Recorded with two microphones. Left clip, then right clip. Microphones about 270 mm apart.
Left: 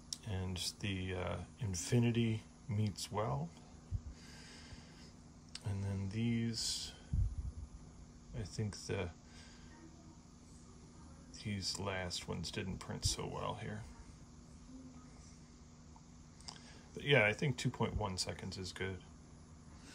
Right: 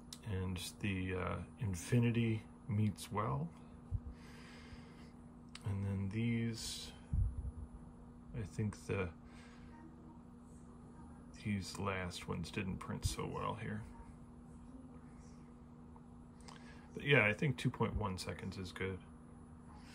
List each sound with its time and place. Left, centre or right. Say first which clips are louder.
0.1 s speech: left 1 dB; centre
5.5 s speech: even; centre
8.4 s speech: even; centre
11.3 s speech: left 3 dB; centre
16.4 s speech: left 3 dB; centre